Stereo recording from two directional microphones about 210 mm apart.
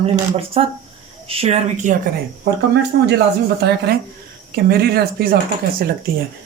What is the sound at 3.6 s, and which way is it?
Speech, 50° right (ahead or behind).